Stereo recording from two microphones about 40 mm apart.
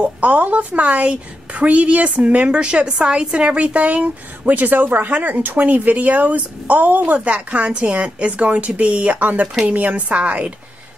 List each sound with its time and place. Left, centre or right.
0.0 s speech: right
2.4 s speech: right
7.2 s speech: right
10.1 s speech: right